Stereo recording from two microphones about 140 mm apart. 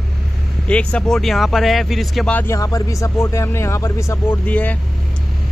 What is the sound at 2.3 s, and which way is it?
Speech, 20° left (ahead or behind).